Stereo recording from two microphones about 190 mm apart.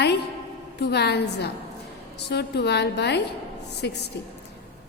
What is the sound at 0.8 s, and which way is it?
A woman's voice, 60° left (ahead or behind).